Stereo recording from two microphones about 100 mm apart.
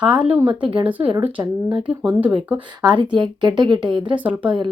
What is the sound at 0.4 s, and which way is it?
Speech, 55° right (ahead or behind).